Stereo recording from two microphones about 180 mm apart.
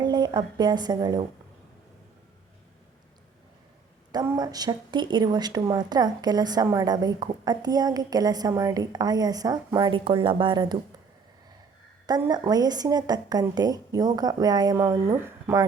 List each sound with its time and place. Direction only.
0.0 s a woman's voice: 25° right (ahead or behind)
4.1 s a woman's voice: 20° right (ahead or behind)
12.3 s a woman's voice: 20° right (ahead or behind)